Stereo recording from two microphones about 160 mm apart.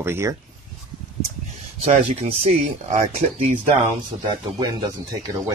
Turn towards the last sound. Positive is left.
turn(degrees=-25)  # may be behind; listen again after turning